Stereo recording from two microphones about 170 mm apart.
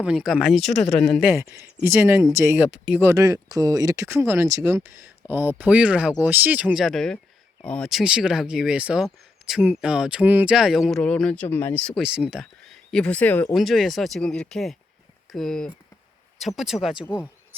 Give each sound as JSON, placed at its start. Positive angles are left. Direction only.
{"t": 0.0, "sound": "speech", "side_deg": -5}
{"t": 1.3, "sound": "speech", "side_deg": -15}
{"t": 2.6, "sound": "speech", "side_deg": -5}